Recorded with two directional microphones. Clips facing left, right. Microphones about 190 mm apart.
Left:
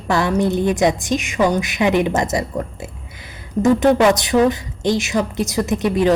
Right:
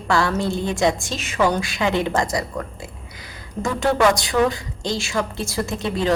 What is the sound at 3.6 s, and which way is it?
A woman's voice, 20° left (ahead or behind).